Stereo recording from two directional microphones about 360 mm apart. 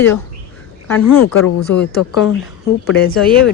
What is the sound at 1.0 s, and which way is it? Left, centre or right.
Speech, left.